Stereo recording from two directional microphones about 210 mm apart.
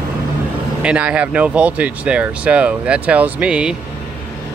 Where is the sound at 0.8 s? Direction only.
5° right (ahead or behind).